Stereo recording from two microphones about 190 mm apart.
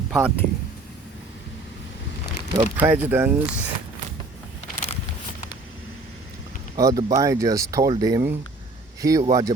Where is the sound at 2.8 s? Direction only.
10° right (ahead or behind).